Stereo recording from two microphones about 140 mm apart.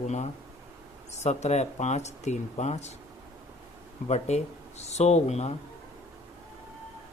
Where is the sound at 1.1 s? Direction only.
55° left (ahead or behind).